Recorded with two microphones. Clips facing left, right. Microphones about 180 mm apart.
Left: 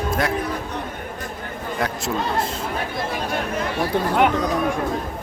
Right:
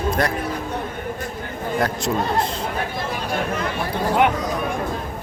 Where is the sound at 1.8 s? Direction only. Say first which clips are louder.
Right 2 dB; centre (ahead or behind).